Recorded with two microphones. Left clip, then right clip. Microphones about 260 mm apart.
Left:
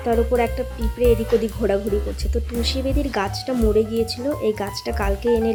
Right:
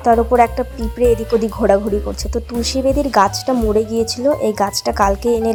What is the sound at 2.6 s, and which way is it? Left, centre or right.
Speech, centre.